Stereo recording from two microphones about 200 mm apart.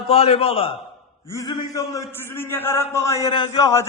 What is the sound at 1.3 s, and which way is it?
A man's voice, 15° left (ahead or behind).